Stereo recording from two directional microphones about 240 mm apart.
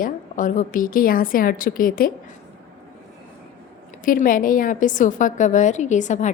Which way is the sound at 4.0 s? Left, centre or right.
Left.